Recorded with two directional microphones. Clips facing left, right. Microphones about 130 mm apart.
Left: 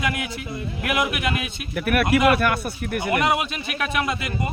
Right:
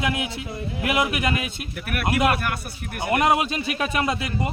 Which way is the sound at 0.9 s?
35° right (ahead or behind).